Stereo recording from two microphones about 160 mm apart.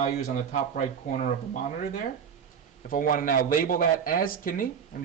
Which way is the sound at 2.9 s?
60° left (ahead or behind).